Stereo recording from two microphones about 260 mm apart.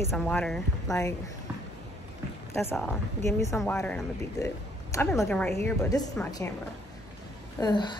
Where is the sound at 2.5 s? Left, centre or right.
Centre.